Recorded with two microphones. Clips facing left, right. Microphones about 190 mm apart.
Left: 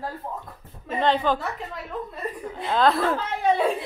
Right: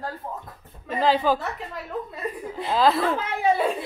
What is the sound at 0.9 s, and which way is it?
Speech, 5° right (ahead or behind).